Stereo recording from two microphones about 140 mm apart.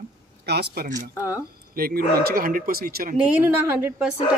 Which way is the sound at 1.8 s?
90° right.